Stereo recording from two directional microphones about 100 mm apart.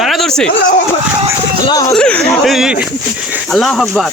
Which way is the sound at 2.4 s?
Centre (ahead or behind).